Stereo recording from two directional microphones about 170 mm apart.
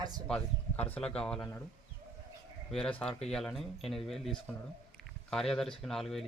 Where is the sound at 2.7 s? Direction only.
5° left (ahead or behind).